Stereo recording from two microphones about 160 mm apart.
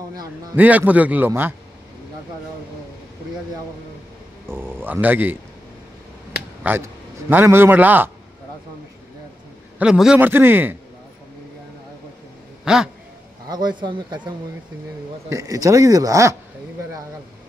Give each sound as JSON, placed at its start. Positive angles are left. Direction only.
{"t": 0.6, "sound": "a man's voice", "side_deg": -10}
{"t": 4.5, "sound": "a man's voice", "side_deg": -15}
{"t": 6.6, "sound": "a man's voice", "side_deg": -10}
{"t": 9.8, "sound": "a man's voice", "side_deg": -5}
{"t": 12.6, "sound": "a sound", "side_deg": -5}
{"t": 13.5, "sound": "speech", "side_deg": -25}